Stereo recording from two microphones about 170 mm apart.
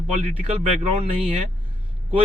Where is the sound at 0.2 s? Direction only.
45° right (ahead or behind).